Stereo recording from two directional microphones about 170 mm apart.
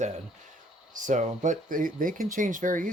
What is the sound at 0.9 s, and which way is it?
Speech, 45° right (ahead or behind).